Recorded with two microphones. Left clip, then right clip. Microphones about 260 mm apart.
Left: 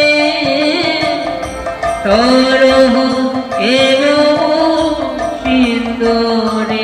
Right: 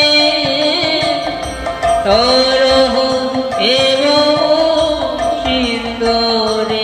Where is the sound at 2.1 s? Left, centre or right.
Right.